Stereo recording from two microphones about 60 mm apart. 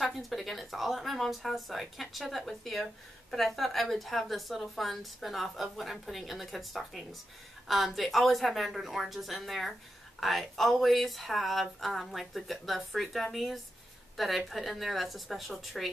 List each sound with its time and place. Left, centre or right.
0.0 s speech: centre